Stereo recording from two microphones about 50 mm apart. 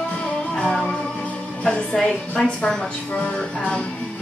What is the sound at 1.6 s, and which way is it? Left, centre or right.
Music, left.